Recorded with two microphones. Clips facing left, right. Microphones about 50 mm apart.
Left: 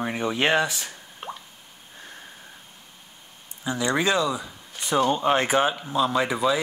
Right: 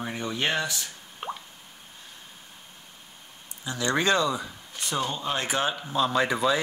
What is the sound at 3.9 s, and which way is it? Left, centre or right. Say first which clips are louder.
Speech: even; centre.